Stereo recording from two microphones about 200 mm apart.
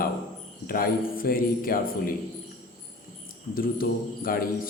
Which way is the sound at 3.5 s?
45° left (ahead or behind).